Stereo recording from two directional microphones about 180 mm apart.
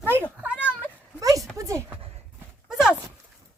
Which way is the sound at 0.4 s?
5° right (ahead or behind).